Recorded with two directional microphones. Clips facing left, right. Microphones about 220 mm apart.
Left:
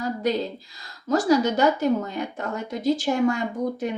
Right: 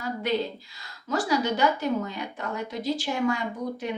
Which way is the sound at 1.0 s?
40° left (ahead or behind).